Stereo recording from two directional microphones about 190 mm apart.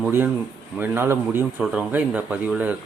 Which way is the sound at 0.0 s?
10° right (ahead or behind).